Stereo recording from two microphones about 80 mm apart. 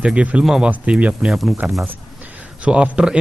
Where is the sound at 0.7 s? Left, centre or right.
Centre.